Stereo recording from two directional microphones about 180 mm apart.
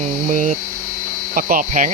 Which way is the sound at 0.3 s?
45° right (ahead or behind).